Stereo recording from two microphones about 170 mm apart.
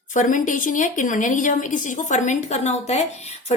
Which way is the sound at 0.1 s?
50° left (ahead or behind).